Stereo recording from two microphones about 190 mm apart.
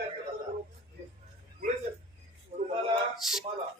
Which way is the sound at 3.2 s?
Centre (ahead or behind).